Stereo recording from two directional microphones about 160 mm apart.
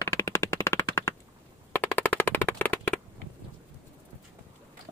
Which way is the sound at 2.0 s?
15° left (ahead or behind).